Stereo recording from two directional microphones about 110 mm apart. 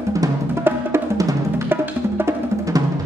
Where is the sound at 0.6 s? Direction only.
25° right (ahead or behind).